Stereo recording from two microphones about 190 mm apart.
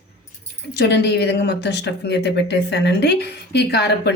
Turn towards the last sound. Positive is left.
turn(degrees=60)  # may be behind; listen again after turning